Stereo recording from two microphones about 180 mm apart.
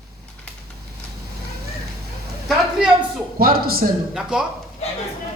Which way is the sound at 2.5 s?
5° right (ahead or behind).